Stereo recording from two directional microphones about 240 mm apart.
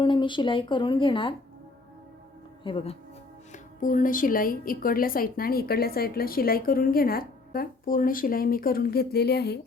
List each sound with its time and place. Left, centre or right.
0.0 s speech: centre
2.6 s speech: left
3.5 s speech: left